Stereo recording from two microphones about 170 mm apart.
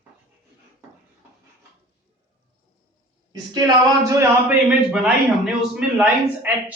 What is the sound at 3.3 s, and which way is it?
Speech, 20° right (ahead or behind).